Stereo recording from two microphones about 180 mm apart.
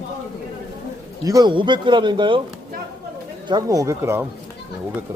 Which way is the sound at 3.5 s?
20° right (ahead or behind).